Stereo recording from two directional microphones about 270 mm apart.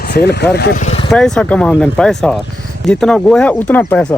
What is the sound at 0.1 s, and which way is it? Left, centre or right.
Speech, left.